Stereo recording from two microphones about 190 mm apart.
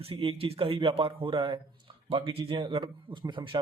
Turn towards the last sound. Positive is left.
turn(degrees=-25)  # may be behind; listen again after turning